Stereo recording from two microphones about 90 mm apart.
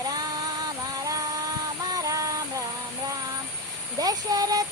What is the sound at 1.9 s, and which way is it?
Music, 40° right (ahead or behind).